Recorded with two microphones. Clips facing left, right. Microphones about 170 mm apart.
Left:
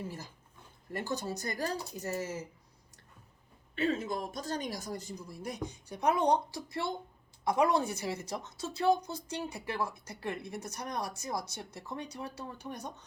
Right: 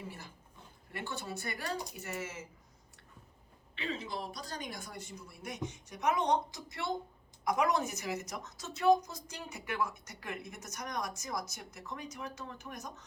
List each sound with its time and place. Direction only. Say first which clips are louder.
0.9 s a woman's voice: left 5 dB; 40° left (ahead or behind)
3.8 s a woman's voice: left 7 dB; 45° left (ahead or behind)